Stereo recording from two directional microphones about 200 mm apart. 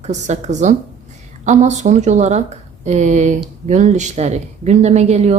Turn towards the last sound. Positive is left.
turn(degrees=-35)  # may be behind; listen again after turning